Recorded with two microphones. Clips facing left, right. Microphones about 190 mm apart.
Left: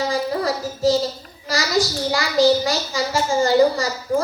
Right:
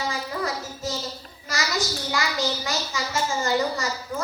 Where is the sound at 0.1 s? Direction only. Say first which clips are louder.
Left 7 dB; 35° left (ahead or behind).